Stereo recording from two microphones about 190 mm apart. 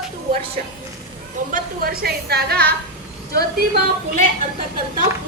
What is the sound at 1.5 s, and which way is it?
A woman's voice, 50° right (ahead or behind).